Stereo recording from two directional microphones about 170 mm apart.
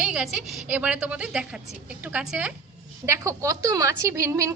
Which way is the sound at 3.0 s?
20° right (ahead or behind).